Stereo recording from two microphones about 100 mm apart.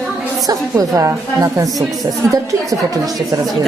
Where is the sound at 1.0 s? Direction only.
30° right (ahead or behind).